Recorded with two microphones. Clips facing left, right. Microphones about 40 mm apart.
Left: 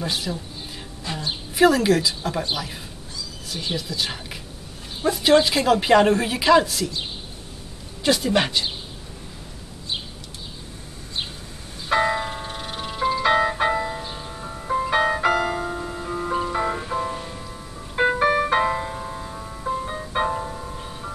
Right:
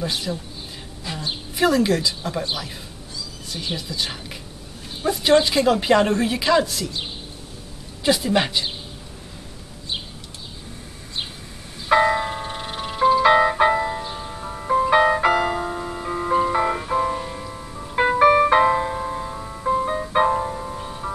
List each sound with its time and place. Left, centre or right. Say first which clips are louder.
0.0 s a woman's voice: right 1 dB; centre
1.5 s a woman's voice: left 2 dB; centre
8.0 s a woman's voice: right 1 dB; centre
11.9 s music: right 4 dB; centre